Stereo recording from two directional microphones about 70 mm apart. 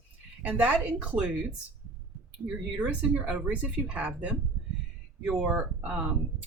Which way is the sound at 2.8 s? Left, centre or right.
Centre.